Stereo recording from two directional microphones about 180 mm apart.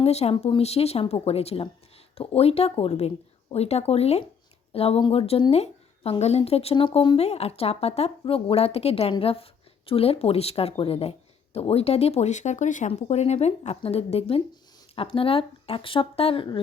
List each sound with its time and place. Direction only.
0.0 s a woman's voice: 35° left (ahead or behind)